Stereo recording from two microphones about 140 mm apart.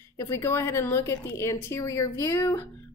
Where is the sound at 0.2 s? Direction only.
20° left (ahead or behind).